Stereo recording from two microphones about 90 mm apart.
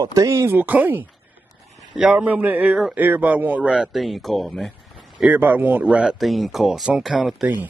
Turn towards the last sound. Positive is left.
turn(degrees=-5)  # may be behind; listen again after turning